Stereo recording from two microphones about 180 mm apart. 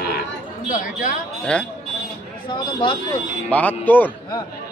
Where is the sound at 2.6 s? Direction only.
25° left (ahead or behind).